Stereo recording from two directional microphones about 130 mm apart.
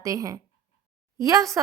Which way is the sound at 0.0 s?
25° right (ahead or behind).